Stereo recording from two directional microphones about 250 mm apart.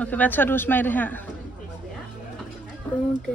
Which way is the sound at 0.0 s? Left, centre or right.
Centre.